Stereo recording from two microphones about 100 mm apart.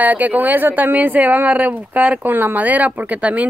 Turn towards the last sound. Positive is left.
turn(degrees=-15)  # may be behind; listen again after turning